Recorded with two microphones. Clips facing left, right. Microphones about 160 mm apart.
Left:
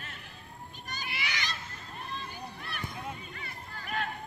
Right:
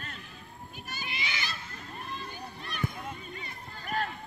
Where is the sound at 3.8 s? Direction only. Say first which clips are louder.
Right 2 dB; 40° right (ahead or behind).